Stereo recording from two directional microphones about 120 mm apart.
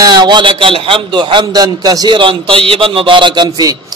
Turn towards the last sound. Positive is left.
turn(degrees=-35)  # may be behind; listen again after turning